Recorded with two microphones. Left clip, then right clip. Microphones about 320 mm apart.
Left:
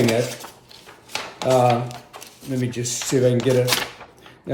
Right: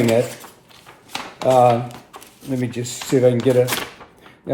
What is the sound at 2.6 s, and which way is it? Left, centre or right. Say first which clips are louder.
Speech: left 2 dB; centre.